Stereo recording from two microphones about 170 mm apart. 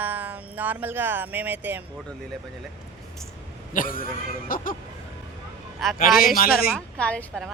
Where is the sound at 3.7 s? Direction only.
55° left (ahead or behind).